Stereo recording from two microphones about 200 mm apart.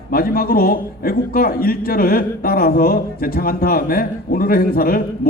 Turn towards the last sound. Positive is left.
turn(degrees=45)  # may be behind; listen again after turning